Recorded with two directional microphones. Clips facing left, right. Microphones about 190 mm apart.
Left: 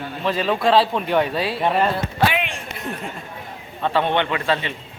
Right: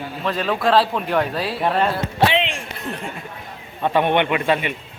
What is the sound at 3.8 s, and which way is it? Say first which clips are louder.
Speech: right 2 dB; 15° right (ahead or behind).